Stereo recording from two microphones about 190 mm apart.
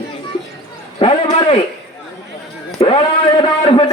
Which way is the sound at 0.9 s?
30° left (ahead or behind).